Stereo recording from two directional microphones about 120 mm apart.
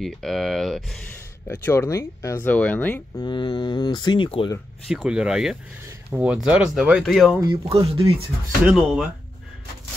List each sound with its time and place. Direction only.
0.0 s speech: 5° left (ahead or behind)
1.5 s speech: 20° left (ahead or behind)
2.5 s speech: 15° left (ahead or behind)
3.2 s speech: 40° left (ahead or behind)
4.8 s speech: 5° right (ahead or behind)
7.3 s speech: 25° right (ahead or behind)
7.7 s speech: 55° right (ahead or behind)
8.6 s speech: 5° right (ahead or behind)